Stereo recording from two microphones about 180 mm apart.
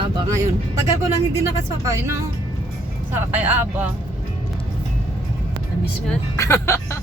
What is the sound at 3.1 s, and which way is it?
Speech, 10° right (ahead or behind).